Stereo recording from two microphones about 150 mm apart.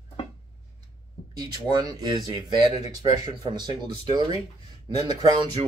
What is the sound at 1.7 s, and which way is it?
Speech, 25° right (ahead or behind).